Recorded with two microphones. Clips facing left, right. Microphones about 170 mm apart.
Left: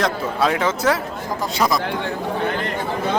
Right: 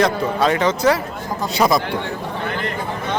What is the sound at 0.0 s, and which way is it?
Speech, centre (ahead or behind).